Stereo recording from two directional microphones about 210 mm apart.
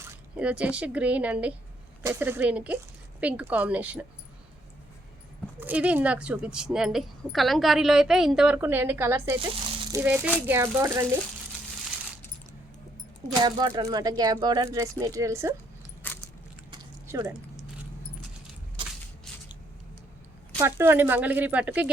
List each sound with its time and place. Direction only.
0.0 s speech: 5° right (ahead or behind)
5.5 s a woman's voice: 5° right (ahead or behind)
9.5 s rattle: 20° right (ahead or behind)
10.0 s speech: 10° right (ahead or behind)
13.2 s speech: 20° right (ahead or behind)
16.0 s keys jangling: 10° left (ahead or behind)
16.7 s a sound: 15° right (ahead or behind)
18.8 s a sound: 25° right (ahead or behind)
20.6 s speech: 10° right (ahead or behind)